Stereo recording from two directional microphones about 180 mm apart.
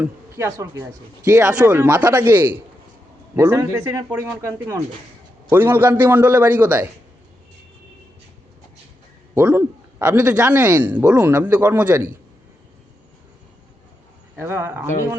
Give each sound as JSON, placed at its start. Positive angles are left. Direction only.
{"t": 0.0, "sound": "speech", "side_deg": -15}
{"t": 9.3, "sound": "speech", "side_deg": -15}
{"t": 14.3, "sound": "speech", "side_deg": -15}